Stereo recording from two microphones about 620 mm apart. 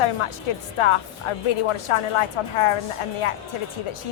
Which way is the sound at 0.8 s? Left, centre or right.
Left.